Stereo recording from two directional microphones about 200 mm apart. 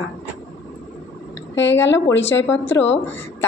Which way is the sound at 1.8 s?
65° left (ahead or behind).